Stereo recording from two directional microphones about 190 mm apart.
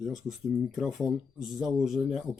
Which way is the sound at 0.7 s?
Centre (ahead or behind).